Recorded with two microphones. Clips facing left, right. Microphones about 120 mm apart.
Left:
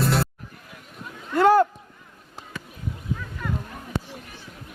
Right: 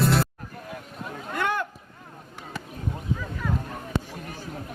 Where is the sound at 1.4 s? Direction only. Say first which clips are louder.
Left 11 dB; 35° left (ahead or behind).